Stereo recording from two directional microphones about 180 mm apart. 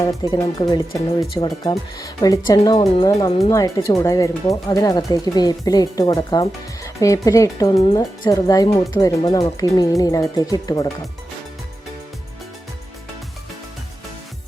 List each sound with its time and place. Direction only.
0.0 s speech: 20° left (ahead or behind)